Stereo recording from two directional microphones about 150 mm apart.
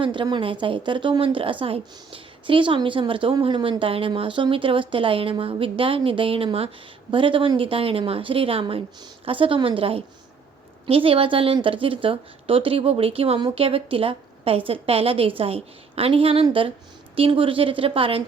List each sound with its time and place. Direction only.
0.0 s a woman's voice: 35° right (ahead or behind)